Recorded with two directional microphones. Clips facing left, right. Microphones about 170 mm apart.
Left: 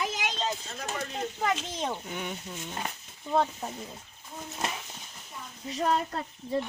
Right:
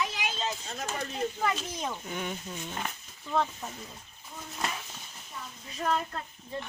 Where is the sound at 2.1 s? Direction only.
10° left (ahead or behind).